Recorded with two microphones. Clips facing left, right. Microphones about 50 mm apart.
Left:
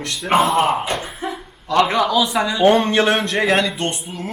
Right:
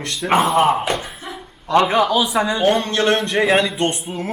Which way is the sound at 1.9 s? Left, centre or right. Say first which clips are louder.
Right 1 dB; centre.